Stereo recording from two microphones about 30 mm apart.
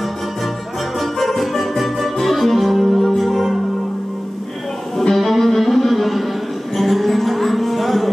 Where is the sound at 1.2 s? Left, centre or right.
Centre.